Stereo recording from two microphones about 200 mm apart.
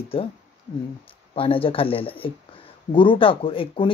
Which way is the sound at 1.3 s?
30° left (ahead or behind).